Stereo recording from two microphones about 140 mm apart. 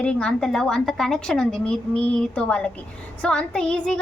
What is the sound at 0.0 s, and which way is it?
A woman's voice, 5° left (ahead or behind).